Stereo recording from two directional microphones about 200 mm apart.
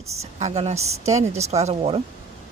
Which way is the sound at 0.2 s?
35° right (ahead or behind).